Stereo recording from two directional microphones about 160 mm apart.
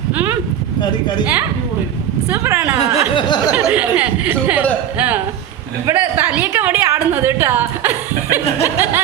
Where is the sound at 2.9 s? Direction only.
30° left (ahead or behind).